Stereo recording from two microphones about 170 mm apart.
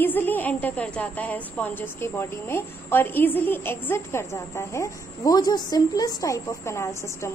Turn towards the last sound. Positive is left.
turn(degrees=15)  # may be behind; listen again after turning